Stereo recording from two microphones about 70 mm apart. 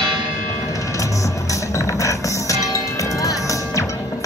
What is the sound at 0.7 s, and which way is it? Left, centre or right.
Music, left.